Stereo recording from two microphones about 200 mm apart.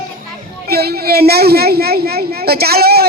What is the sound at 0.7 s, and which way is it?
Speech, 50° right (ahead or behind).